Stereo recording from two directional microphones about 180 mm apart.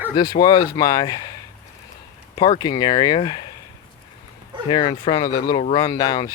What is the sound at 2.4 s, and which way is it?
Speech, 25° left (ahead or behind).